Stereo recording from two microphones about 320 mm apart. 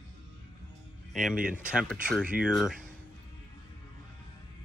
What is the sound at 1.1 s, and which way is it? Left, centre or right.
Speech, centre.